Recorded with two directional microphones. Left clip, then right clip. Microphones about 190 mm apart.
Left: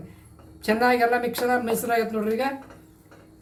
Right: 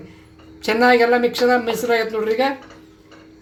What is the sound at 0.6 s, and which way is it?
Speech, 35° right (ahead or behind).